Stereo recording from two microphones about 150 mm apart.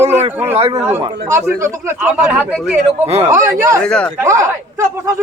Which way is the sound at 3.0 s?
45° right (ahead or behind).